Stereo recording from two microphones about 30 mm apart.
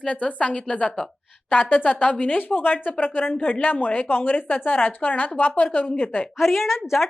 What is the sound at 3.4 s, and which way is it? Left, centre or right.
Speech, left.